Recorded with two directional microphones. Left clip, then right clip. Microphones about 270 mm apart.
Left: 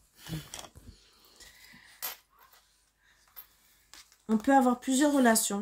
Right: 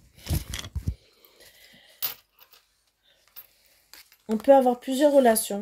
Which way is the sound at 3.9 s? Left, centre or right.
Right.